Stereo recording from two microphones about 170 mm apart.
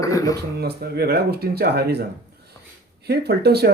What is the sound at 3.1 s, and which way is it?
Speech, 70° right (ahead or behind).